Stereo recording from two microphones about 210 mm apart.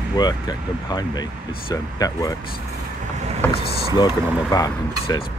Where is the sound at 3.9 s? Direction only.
20° left (ahead or behind).